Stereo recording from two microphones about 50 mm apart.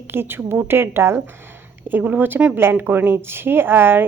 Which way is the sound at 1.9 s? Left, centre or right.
Right.